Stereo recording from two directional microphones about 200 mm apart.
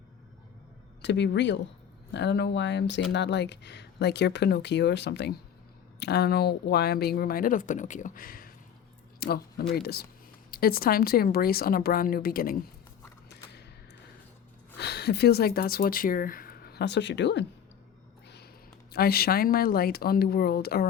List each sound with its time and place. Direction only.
1.0 s speech: 60° left (ahead or behind)
14.8 s speech: 55° left (ahead or behind)
18.9 s speech: 50° left (ahead or behind)